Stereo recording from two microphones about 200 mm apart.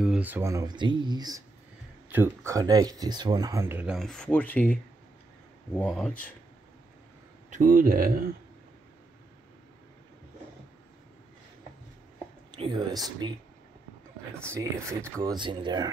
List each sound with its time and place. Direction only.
0.0 s speech: 5° right (ahead or behind)
5.8 s speech: centre (ahead or behind)
7.4 s speech: 40° right (ahead or behind)
12.4 s speech: 25° right (ahead or behind)
14.4 s speech: 15° right (ahead or behind)